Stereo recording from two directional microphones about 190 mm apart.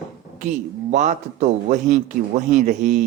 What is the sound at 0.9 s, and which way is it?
Speech, 40° right (ahead or behind).